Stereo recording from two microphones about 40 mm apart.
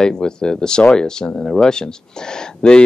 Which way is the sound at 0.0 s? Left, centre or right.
Centre.